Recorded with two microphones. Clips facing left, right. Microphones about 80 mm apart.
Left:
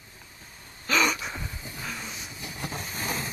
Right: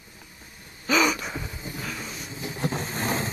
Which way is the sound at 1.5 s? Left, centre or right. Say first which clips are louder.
Right 4 dB; centre.